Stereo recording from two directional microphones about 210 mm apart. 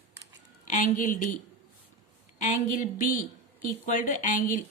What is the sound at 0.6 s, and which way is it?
Speech, 40° left (ahead or behind).